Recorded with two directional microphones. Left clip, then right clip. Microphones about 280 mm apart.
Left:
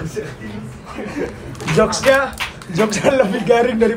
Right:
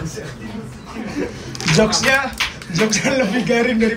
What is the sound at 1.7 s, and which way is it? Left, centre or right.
Speech, centre.